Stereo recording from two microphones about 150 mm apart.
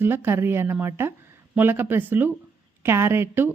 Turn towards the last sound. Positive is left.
turn(degrees=-15)  # may be behind; listen again after turning